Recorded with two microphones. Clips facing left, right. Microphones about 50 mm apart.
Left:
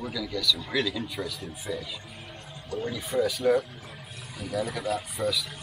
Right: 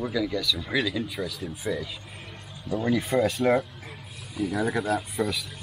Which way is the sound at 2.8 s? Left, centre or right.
Right.